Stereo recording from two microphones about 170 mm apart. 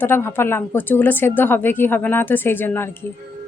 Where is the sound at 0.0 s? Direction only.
15° left (ahead or behind).